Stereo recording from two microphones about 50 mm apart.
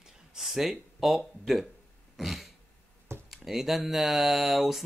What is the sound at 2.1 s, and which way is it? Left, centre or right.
Throat clearing, centre.